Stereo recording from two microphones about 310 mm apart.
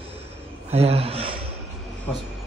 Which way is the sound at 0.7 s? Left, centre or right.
Centre.